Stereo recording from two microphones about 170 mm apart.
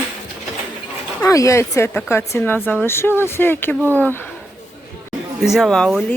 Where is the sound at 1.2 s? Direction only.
20° left (ahead or behind).